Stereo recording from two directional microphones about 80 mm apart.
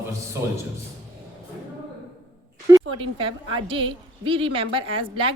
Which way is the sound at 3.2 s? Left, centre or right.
Right.